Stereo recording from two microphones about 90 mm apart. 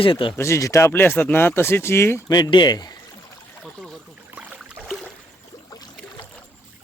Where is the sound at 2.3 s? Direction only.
50° left (ahead or behind).